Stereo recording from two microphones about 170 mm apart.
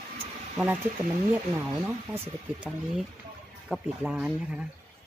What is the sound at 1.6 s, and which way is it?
Speech, 10° right (ahead or behind).